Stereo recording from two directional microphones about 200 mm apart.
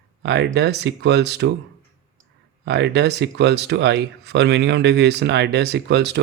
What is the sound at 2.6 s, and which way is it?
Speech, 60° right (ahead or behind).